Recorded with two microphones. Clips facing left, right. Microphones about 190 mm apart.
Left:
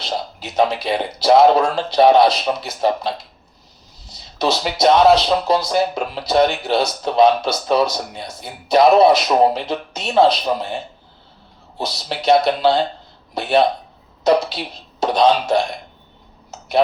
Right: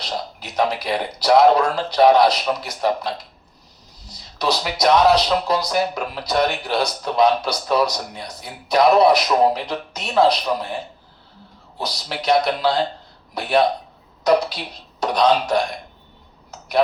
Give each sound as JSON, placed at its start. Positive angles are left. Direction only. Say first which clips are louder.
{"t": 0.0, "sound": "speech", "louder": "left 3 dB", "side_deg": 25}
{"t": 11.8, "sound": "speech", "louder": "left 3 dB", "side_deg": 25}
{"t": 16.5, "sound": "a sound", "louder": "left 1 dB", "side_deg": 25}